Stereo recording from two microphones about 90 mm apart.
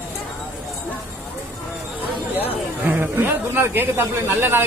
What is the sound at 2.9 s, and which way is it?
A man's voice, 25° right (ahead or behind).